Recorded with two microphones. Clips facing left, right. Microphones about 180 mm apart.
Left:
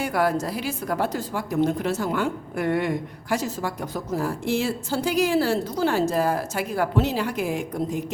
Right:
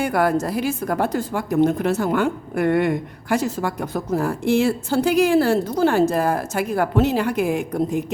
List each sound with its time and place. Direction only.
0.0 s a woman's voice: 55° right (ahead or behind)